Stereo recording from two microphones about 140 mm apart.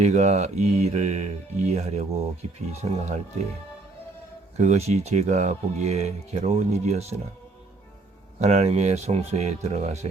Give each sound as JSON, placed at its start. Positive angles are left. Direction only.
{"t": 0.0, "sound": "speech", "side_deg": -55}
{"t": 4.5, "sound": "speech", "side_deg": -55}
{"t": 8.4, "sound": "speech", "side_deg": -50}